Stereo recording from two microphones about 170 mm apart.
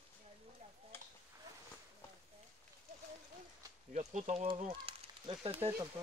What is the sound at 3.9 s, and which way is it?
Speech, 45° right (ahead or behind).